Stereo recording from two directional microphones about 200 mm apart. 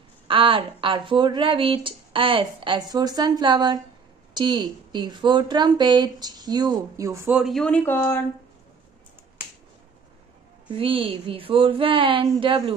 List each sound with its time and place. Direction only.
0.3 s a woman's voice: 25° right (ahead or behind); by 8.2 s 10° left (ahead or behind)
10.7 s a woman's voice: 25° right (ahead or behind)